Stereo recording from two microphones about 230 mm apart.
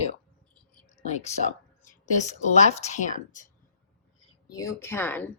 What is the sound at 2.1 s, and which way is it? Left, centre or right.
A woman's voice, left.